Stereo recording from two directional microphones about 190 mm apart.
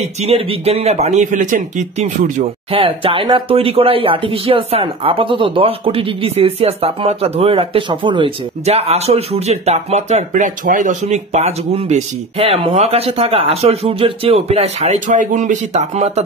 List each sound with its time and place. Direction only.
0.0 s speech: 35° right (ahead or behind)
2.7 s speech: 30° right (ahead or behind)